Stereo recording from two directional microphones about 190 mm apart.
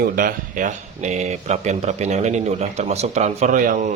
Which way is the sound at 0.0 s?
45° right (ahead or behind).